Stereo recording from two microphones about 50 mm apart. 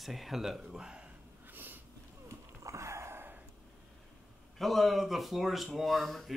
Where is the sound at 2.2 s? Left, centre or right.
Right.